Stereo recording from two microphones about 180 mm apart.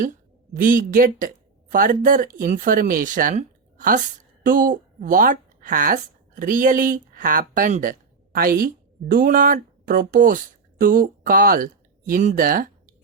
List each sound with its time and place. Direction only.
0.5 s a woman's voice: 50° right (ahead or behind)